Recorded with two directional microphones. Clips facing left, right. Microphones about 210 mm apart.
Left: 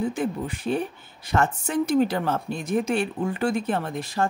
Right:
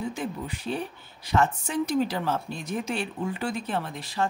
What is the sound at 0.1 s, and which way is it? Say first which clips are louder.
Speech: left 5 dB; 50° left (ahead or behind).